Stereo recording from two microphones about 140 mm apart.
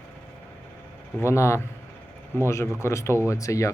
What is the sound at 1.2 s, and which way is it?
Speech, 20° left (ahead or behind).